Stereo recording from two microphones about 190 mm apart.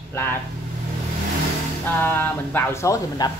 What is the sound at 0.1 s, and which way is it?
Speech, 10° left (ahead or behind).